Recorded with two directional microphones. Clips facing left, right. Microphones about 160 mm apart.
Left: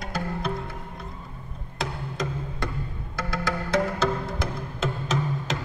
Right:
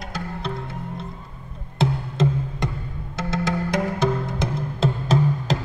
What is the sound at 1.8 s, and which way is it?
Music, 25° right (ahead or behind).